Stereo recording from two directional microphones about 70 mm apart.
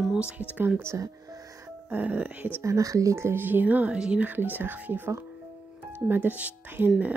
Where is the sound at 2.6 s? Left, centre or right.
Right; by 4.2 s centre.